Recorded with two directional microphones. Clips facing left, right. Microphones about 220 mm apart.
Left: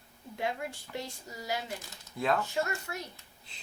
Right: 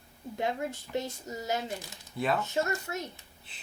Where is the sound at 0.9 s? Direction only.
20° right (ahead or behind).